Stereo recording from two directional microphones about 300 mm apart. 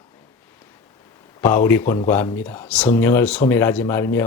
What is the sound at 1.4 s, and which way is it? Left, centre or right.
Speech, centre.